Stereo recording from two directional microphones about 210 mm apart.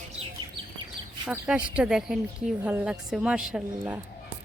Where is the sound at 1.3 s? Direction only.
5° right (ahead or behind).